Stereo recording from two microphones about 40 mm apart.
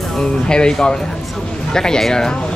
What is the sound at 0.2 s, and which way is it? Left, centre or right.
Speech, centre.